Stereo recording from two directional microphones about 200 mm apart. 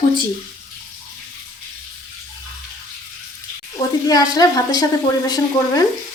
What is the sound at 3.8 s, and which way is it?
A woman's voice, 20° left (ahead or behind).